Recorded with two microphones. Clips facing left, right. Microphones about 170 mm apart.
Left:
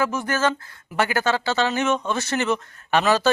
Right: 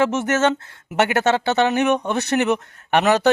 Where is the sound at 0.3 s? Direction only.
75° right (ahead or behind).